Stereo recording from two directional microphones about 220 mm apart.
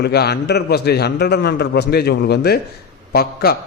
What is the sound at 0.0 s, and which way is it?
A man's voice, 50° left (ahead or behind).